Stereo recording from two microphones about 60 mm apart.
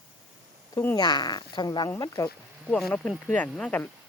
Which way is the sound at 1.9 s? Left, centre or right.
Left.